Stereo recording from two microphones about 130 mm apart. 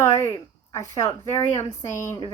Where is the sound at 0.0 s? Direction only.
20° left (ahead or behind).